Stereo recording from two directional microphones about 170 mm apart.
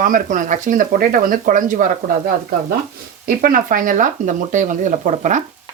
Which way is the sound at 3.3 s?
55° right (ahead or behind).